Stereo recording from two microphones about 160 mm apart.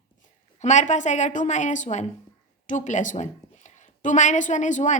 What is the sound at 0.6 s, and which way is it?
A woman's voice, 45° left (ahead or behind).